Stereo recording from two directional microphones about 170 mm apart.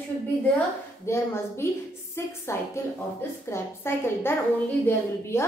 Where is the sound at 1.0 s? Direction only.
15° left (ahead or behind).